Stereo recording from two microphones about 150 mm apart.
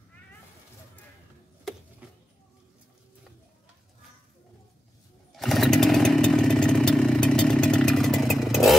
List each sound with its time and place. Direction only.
5.3 s motorcycle: centre (ahead or behind)